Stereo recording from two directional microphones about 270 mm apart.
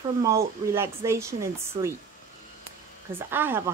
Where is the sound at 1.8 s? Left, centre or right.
Right.